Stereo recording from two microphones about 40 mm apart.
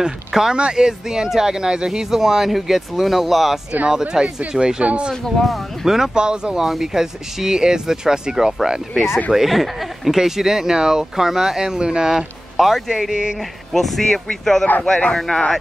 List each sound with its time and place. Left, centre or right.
0.3 s speech: centre
4.0 s speech: right
5.4 s speech: centre
5.9 s speech: centre
6.2 s speech: right
6.6 s speech: centre
12.1 s speech: centre
13.1 s speech: centre
13.7 s speech: centre